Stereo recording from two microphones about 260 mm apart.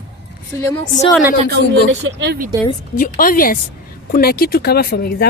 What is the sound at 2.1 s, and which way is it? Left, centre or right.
Speech, right.